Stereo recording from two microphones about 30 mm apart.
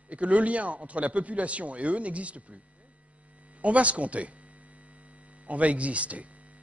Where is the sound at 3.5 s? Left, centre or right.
Right.